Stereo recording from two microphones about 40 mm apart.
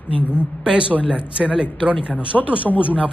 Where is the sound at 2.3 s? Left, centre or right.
Centre.